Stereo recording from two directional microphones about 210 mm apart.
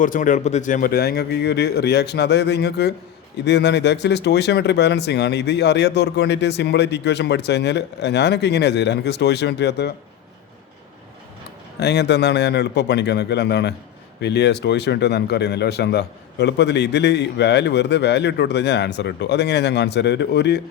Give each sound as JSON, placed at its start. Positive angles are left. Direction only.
{"t": 0.0, "sound": "speech", "side_deg": 40}
{"t": 11.8, "sound": "speech", "side_deg": 50}